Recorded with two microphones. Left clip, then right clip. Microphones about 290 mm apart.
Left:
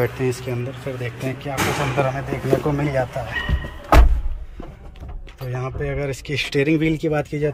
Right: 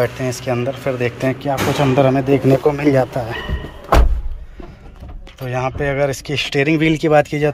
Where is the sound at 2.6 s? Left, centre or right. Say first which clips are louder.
Right 7 dB; right.